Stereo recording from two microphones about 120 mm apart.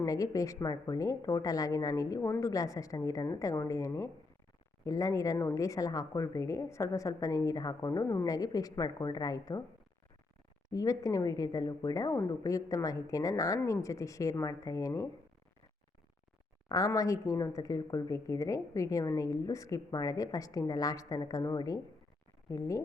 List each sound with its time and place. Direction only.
0.0 s speech: 30° left (ahead or behind)
10.7 s speech: 30° left (ahead or behind)
16.6 s speech: 30° left (ahead or behind)